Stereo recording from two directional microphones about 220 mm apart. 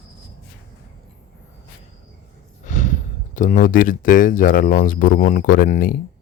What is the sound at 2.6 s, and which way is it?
Speech, 35° left (ahead or behind).